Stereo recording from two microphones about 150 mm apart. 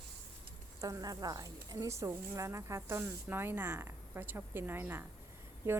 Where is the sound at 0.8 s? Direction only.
20° right (ahead or behind).